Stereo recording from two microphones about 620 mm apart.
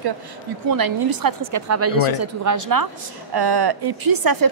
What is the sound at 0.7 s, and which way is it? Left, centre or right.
A woman's voice, right.